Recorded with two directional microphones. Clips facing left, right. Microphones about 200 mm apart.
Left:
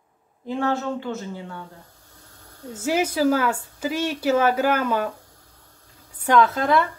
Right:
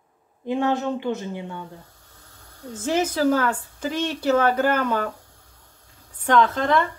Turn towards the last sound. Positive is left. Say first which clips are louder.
# left 1 dB
turn(degrees=10)  # may be behind; listen again after turning